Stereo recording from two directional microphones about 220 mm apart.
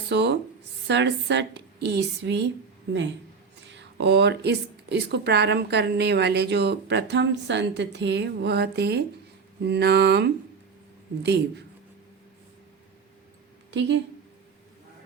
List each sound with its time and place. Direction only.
0.1 s speech: 50° right (ahead or behind)
3.8 s speech: 50° right (ahead or behind)
13.7 s speech: 55° right (ahead or behind)